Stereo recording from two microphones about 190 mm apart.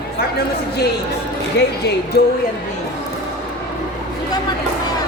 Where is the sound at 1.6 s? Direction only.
60° left (ahead or behind).